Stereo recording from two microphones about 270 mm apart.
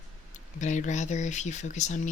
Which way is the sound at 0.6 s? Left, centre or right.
Left.